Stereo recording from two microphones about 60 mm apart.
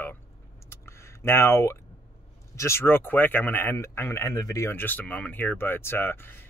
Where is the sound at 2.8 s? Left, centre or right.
Left.